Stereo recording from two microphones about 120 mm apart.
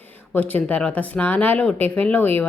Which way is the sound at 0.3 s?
15° left (ahead or behind).